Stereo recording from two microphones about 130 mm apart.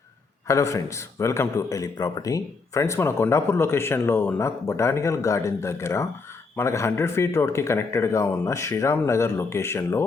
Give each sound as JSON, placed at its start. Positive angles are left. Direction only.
{"t": 0.4, "sound": "a man's voice", "side_deg": 25}